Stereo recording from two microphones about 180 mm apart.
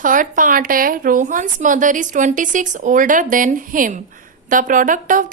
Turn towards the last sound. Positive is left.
turn(degrees=-45)  # may be behind; listen again after turning